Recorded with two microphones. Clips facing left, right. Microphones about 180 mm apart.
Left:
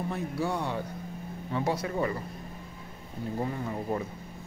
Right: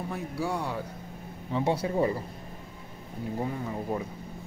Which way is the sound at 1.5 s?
25° right (ahead or behind).